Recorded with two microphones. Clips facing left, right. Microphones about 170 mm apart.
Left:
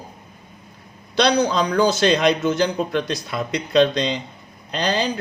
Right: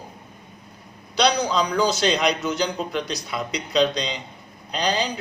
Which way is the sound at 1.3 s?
55° left (ahead or behind).